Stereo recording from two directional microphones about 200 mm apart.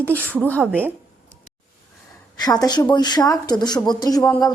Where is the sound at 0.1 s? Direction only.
10° left (ahead or behind).